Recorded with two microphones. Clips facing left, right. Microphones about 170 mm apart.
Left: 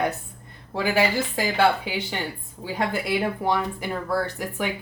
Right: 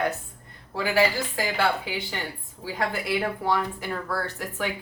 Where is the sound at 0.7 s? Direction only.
20° left (ahead or behind).